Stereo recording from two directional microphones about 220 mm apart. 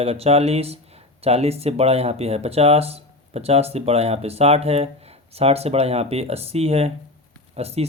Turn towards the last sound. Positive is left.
turn(degrees=-30)  # may be behind; listen again after turning